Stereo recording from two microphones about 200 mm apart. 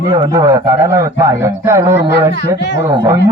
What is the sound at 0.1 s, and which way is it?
Speech, 15° right (ahead or behind).